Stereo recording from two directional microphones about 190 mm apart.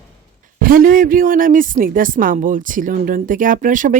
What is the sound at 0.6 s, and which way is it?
A woman's voice, 50° right (ahead or behind).